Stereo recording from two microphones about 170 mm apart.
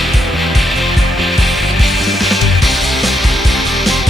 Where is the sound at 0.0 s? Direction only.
Centre (ahead or behind).